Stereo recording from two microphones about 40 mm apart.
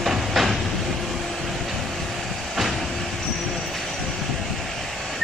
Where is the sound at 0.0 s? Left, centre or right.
Centre.